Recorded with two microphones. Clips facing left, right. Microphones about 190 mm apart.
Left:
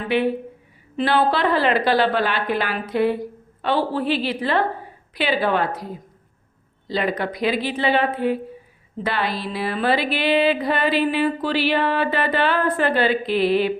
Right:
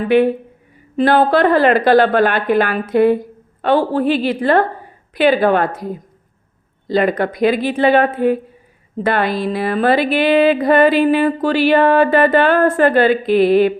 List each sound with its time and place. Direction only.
0.1 s music: 50° right (ahead or behind)